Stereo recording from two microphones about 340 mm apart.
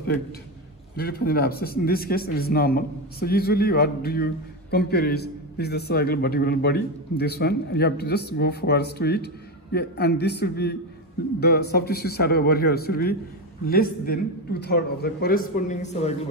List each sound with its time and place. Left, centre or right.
0.9 s a man's voice: left